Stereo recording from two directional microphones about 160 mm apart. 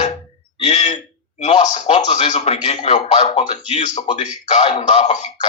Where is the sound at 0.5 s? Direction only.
40° left (ahead or behind).